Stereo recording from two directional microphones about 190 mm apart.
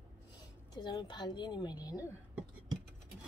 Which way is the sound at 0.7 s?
20° left (ahead or behind).